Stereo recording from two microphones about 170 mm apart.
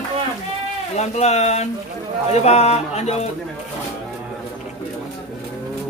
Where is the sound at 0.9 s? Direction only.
40° left (ahead or behind).